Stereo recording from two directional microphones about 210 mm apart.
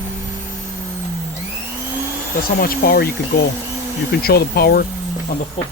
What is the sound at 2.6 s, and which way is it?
Speech, 45° left (ahead or behind).